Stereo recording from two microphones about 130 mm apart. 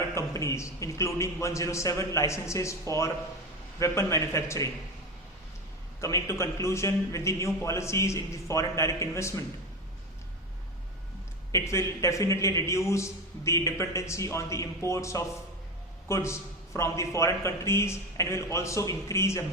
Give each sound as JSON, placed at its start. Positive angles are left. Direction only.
{"t": 0.1, "sound": "a man's voice", "side_deg": 25}
{"t": 6.0, "sound": "a man's voice", "side_deg": 25}
{"t": 11.5, "sound": "a man's voice", "side_deg": 20}